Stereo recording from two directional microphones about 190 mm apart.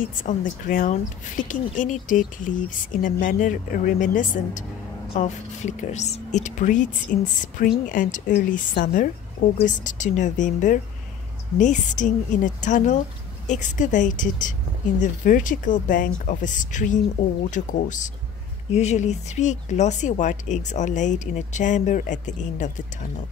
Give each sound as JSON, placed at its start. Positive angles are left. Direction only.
{"t": 0.0, "sound": "speech", "side_deg": 45}